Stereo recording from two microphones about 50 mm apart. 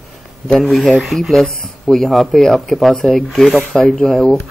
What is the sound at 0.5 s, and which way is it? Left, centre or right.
Speech, centre.